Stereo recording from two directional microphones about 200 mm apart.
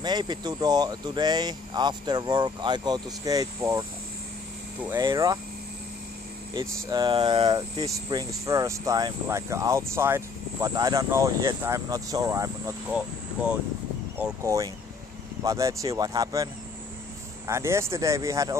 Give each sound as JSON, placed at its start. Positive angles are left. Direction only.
{"t": 0.0, "sound": "speech", "side_deg": -20}
{"t": 4.9, "sound": "speech", "side_deg": -20}
{"t": 6.5, "sound": "speech", "side_deg": -20}
{"t": 17.5, "sound": "speech", "side_deg": -15}